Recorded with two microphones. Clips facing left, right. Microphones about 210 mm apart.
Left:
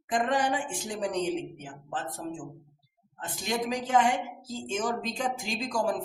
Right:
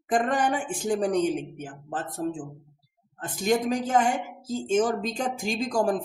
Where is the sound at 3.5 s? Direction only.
40° right (ahead or behind).